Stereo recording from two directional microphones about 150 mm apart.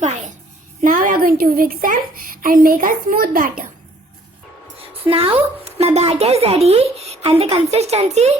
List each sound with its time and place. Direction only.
0.8 s speech: 60° right (ahead or behind)
5.0 s speech: 40° right (ahead or behind)